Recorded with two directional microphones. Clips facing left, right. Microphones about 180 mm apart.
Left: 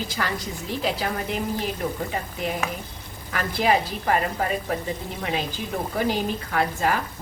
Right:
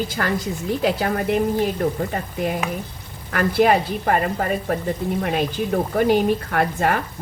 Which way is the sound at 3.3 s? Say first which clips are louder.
Right 5 dB; 50° right (ahead or behind).